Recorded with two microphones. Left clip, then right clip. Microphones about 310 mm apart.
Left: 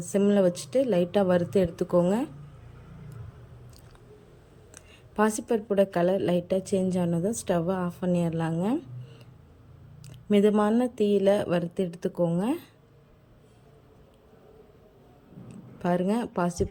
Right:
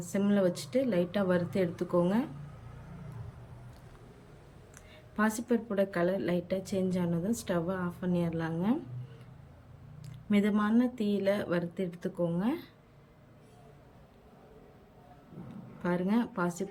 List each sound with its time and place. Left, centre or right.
0.0 s a woman's voice: centre
4.7 s a woman's voice: centre
10.0 s a woman's voice: centre
15.8 s a woman's voice: centre